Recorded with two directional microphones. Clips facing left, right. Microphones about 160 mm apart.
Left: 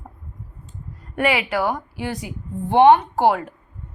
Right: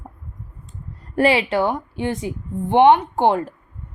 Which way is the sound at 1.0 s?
30° right (ahead or behind).